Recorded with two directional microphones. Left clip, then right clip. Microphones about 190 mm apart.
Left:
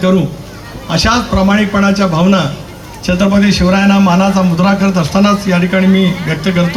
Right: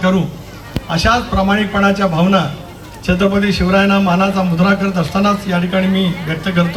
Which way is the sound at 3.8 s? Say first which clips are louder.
Right 1 dB; 50° right (ahead or behind).